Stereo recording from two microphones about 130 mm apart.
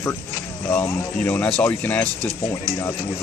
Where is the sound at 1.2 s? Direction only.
10° left (ahead or behind).